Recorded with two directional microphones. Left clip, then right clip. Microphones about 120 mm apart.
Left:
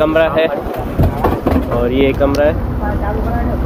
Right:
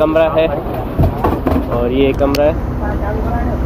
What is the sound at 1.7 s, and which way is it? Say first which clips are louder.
Speech: even; 45° left (ahead or behind).